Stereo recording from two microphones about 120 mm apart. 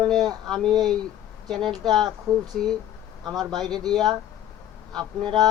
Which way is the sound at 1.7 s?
35° right (ahead or behind).